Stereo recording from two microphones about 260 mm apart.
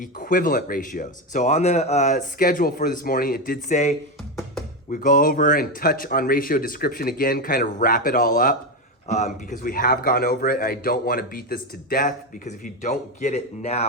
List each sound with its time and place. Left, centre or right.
0.0 s a man's voice: left